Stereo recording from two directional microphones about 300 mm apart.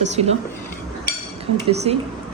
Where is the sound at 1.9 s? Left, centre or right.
Centre.